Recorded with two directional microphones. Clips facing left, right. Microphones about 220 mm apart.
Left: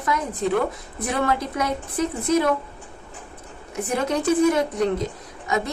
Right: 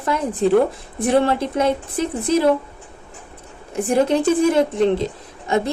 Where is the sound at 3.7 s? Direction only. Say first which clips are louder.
Right 7 dB; 30° right (ahead or behind).